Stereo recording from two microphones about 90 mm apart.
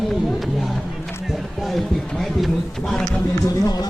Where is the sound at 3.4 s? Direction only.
45° left (ahead or behind).